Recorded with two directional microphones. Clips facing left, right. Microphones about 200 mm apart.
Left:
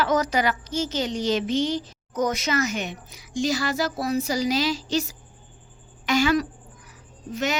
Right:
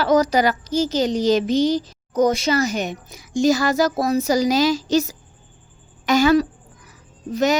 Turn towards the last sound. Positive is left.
turn(degrees=-35)  # may be behind; listen again after turning